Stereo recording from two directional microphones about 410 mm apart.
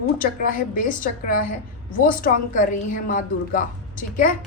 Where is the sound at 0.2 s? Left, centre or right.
Centre.